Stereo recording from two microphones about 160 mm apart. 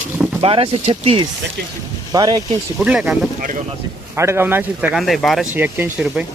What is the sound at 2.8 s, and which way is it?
Speech, 5° right (ahead or behind).